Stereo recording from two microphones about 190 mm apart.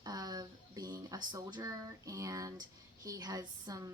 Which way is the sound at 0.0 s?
20° right (ahead or behind).